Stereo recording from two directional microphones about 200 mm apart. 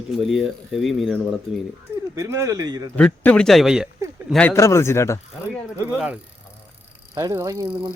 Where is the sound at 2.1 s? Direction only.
15° right (ahead or behind).